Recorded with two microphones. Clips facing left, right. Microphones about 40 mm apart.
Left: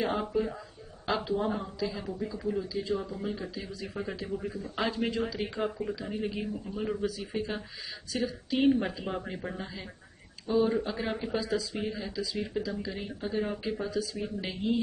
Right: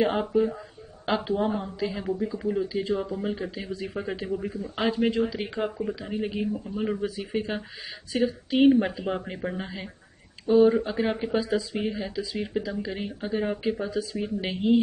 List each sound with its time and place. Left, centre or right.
0.0 s speech: right
2.8 s speech: right
3.1 s speech: right
8.7 s speech: centre
10.7 s speech: centre